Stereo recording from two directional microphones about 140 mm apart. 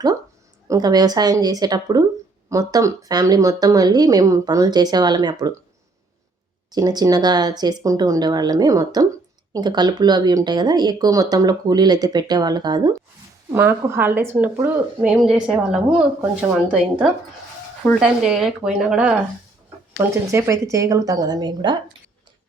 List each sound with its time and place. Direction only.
0.7 s speech: 30° right (ahead or behind)
6.7 s speech: 30° right (ahead or behind)
13.5 s speech: 15° right (ahead or behind)
20.0 s speech: 20° right (ahead or behind)